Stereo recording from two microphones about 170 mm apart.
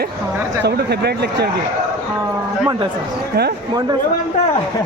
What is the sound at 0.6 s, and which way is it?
Speech, 75° right (ahead or behind).